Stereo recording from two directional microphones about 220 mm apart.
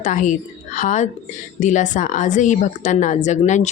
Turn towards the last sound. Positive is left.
turn(degrees=35)  # may be behind; listen again after turning